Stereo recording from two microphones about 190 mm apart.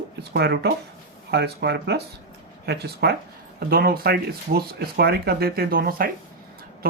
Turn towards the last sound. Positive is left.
turn(degrees=-50)  # may be behind; listen again after turning